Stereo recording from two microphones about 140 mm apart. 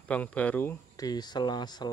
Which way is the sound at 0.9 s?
25° left (ahead or behind).